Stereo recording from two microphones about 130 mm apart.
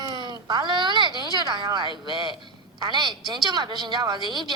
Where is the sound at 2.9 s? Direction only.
35° right (ahead or behind).